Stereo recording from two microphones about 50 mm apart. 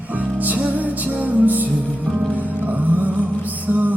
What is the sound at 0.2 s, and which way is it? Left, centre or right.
Music, right.